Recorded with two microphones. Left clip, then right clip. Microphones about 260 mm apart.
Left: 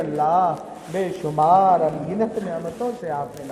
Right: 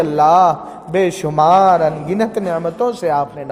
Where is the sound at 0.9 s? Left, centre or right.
Right.